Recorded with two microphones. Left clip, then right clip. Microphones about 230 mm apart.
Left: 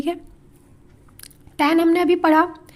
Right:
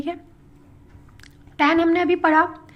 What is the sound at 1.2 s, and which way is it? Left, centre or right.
Speech, left.